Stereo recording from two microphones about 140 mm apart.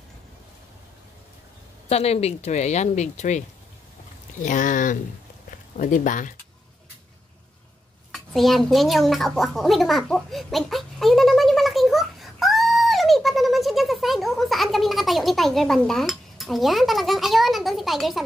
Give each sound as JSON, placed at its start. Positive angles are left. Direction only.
{"t": 1.9, "sound": "speech", "side_deg": 50}
{"t": 4.5, "sound": "speech", "side_deg": 65}
{"t": 8.1, "sound": "a sound", "side_deg": 0}